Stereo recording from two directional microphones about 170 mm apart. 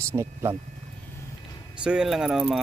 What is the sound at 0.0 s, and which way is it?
Speech, 15° right (ahead or behind).